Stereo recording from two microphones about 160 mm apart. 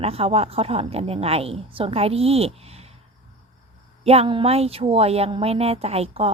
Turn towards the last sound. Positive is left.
turn(degrees=-40)  # may be behind; listen again after turning